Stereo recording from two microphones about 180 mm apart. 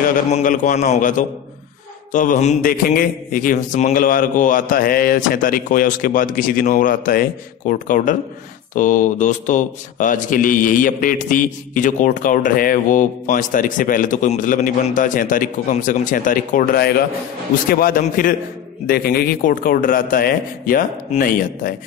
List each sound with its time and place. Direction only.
0.3 s a man's voice: 45° left (ahead or behind)